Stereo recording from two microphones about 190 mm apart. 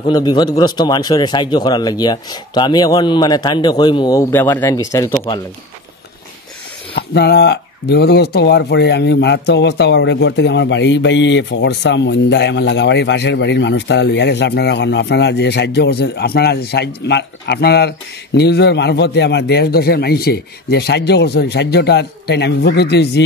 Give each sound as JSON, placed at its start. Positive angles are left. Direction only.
{"t": 0.0, "sound": "speech", "side_deg": 25}
{"t": 7.0, "sound": "speech", "side_deg": 60}